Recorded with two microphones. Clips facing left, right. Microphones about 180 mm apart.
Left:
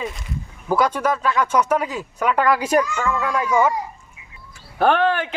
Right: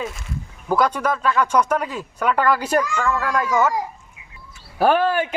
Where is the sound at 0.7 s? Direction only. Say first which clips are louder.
Even; 10° left (ahead or behind).